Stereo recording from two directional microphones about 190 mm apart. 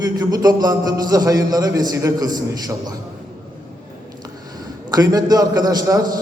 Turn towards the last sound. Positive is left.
turn(degrees=-20)  # may be behind; listen again after turning